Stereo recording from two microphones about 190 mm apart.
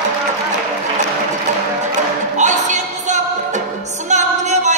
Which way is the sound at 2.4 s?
40° right (ahead or behind).